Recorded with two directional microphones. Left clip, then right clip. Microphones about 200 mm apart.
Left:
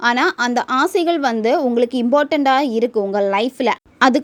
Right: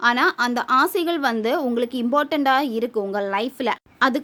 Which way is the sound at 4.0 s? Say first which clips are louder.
Left 6 dB; 25° left (ahead or behind).